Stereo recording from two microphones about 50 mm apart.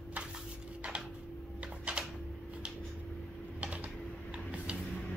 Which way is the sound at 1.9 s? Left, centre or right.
Right.